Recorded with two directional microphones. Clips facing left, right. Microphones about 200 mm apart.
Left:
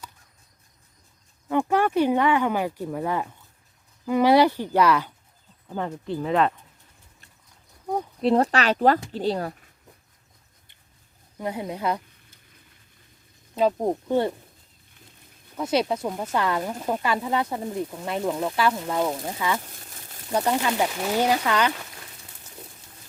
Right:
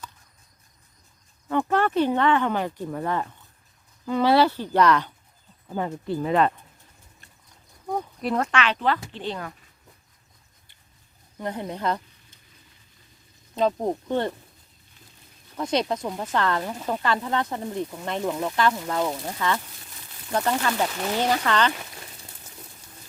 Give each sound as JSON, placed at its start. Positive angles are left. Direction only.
{"t": 1.5, "sound": "speech", "side_deg": 10}
{"t": 5.6, "sound": "speech", "side_deg": -10}
{"t": 8.2, "sound": "speech", "side_deg": 30}
{"t": 11.3, "sound": "speech", "side_deg": 10}
{"t": 13.6, "sound": "speech", "side_deg": 10}
{"t": 15.5, "sound": "speech", "side_deg": 5}
{"t": 19.6, "sound": "a sound", "side_deg": 45}
{"t": 20.3, "sound": "speech", "side_deg": 15}